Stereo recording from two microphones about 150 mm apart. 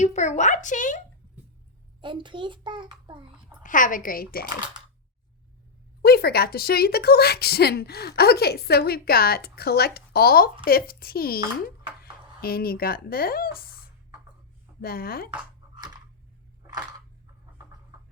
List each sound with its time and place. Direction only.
0.0 s a woman's voice: 50° left (ahead or behind)
2.0 s a child's voice: 35° right (ahead or behind)
3.6 s a woman's voice: 60° left (ahead or behind); by 4.4 s 75° left (ahead or behind)
6.0 s speech: 90° left
12.4 s speech: 90° left
14.8 s speech: 90° left